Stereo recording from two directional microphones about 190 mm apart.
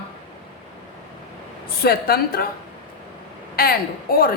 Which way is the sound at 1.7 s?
55° left (ahead or behind).